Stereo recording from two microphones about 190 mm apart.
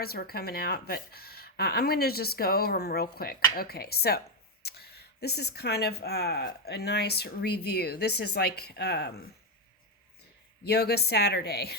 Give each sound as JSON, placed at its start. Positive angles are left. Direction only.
{"t": 0.0, "sound": "speech", "side_deg": 55}
{"t": 10.6, "sound": "speech", "side_deg": 55}